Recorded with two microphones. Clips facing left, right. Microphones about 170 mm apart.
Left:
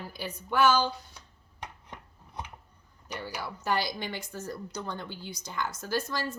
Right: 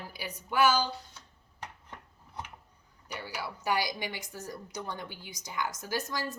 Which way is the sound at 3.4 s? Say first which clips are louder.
Even; 15° right (ahead or behind).